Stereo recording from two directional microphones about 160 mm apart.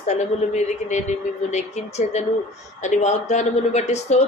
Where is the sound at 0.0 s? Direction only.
45° left (ahead or behind).